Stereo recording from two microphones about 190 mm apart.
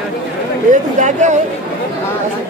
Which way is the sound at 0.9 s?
40° right (ahead or behind).